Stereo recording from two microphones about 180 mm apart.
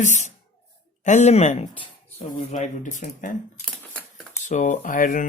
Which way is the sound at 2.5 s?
40° left (ahead or behind).